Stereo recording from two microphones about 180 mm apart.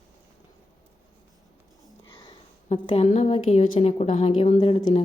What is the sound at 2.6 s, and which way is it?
A woman's voice, 30° left (ahead or behind).